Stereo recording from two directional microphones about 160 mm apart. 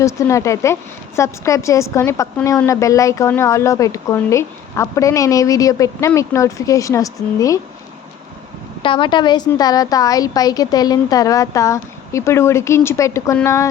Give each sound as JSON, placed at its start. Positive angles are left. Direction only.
{"t": 0.0, "sound": "a woman's voice", "side_deg": 20}
{"t": 8.8, "sound": "a woman's voice", "side_deg": 30}